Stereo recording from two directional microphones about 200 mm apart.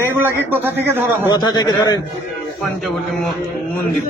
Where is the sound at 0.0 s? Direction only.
10° right (ahead or behind).